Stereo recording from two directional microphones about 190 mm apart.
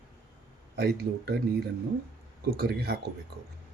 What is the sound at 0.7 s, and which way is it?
Speech, 55° right (ahead or behind).